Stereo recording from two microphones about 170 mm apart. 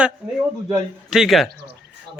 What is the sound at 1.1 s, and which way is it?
Speech, centre (ahead or behind).